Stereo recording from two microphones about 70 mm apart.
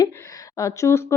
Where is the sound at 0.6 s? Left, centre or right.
Left.